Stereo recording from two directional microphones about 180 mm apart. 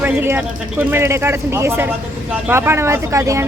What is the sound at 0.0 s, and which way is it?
Speech, 10° right (ahead or behind).